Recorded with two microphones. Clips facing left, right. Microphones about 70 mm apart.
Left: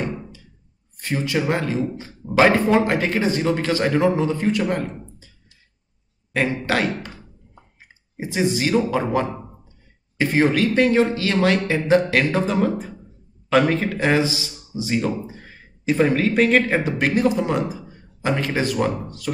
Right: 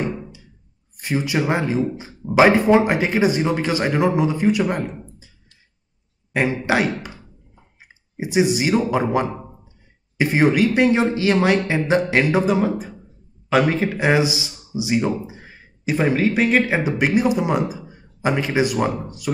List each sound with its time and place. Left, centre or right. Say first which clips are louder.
0.9 s speech: right 1 dB; centre
6.3 s speech: right 2 dB; centre
8.2 s a man's voice: right 3 dB; centre